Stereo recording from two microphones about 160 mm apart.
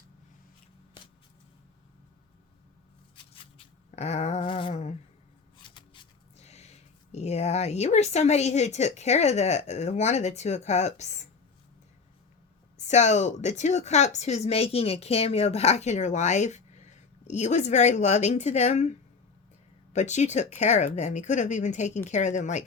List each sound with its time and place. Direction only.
3.9 s speech: 45° left (ahead or behind)
5.5 s shuffling cards: 30° left (ahead or behind)
6.3 s speech: 40° left (ahead or behind)
12.7 s speech: 45° left (ahead or behind)